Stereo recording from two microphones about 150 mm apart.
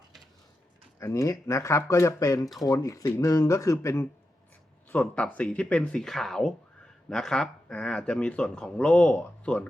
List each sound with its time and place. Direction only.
0.9 s speech: 20° left (ahead or behind)
4.9 s speech: 5° left (ahead or behind)